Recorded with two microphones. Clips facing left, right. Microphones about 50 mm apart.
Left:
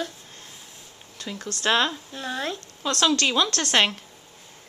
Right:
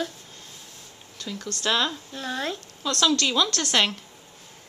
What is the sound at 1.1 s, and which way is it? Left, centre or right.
Speech, centre.